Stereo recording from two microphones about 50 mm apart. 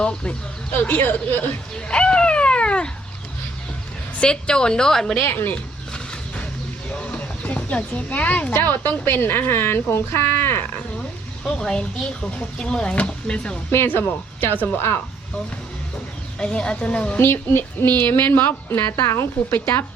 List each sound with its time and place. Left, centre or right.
0.0 s speech: centre
0.7 s speech: left
1.9 s a sound: centre
4.2 s speech: centre
5.2 s speech: left
6.9 s speech: left
8.5 s speech: left
11.4 s speech: centre
13.8 s speech: left
16.4 s a woman's voice: centre
17.2 s speech: left
18.9 s speech: left